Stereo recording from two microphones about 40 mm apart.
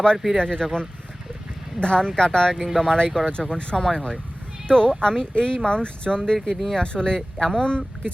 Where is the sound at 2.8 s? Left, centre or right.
Centre.